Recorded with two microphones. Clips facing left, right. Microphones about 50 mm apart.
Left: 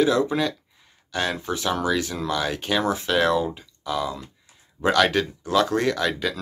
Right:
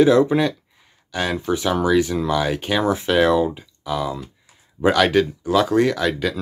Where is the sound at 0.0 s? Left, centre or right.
Right.